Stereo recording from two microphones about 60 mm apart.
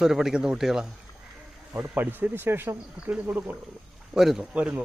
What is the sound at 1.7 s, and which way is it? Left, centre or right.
Speech, right.